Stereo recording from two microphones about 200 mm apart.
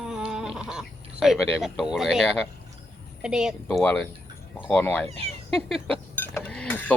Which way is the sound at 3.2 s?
5° right (ahead or behind).